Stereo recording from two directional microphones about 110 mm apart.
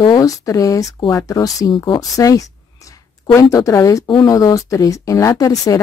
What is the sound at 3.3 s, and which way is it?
A woman's voice, 30° left (ahead or behind).